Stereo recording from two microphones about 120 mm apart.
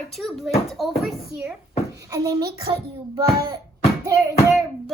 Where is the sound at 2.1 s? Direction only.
30° right (ahead or behind).